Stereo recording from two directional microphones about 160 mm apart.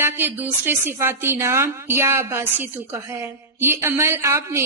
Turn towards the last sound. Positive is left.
turn(degrees=-15)  # may be behind; listen again after turning